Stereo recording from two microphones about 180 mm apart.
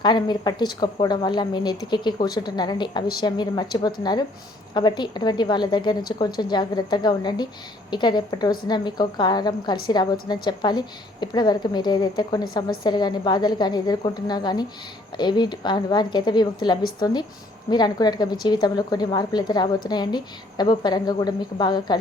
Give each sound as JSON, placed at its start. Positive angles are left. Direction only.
{"t": 0.0, "sound": "a woman's voice", "side_deg": 25}